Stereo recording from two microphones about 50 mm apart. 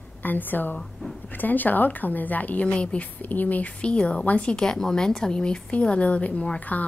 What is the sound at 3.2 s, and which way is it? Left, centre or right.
A woman's voice, left.